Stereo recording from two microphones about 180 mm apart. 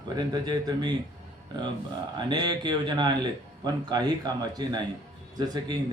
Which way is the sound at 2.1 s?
25° right (ahead or behind).